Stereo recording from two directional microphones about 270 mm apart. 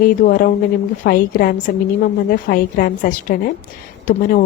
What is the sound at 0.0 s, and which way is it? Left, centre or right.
A woman's voice, left.